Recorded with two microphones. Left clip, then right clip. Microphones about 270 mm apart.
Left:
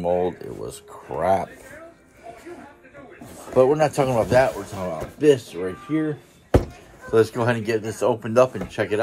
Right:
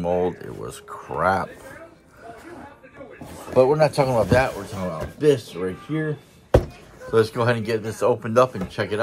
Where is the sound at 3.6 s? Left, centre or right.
Centre.